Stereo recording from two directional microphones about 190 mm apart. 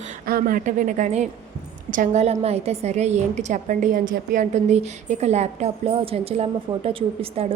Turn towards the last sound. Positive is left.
turn(degrees=-30)  # may be behind; listen again after turning